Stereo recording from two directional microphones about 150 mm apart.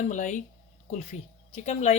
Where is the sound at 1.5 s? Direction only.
45° left (ahead or behind).